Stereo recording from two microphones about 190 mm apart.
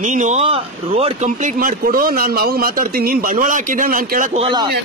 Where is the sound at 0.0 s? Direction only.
40° right (ahead or behind).